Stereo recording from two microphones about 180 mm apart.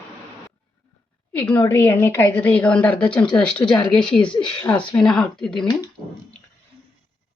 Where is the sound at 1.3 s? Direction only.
10° left (ahead or behind).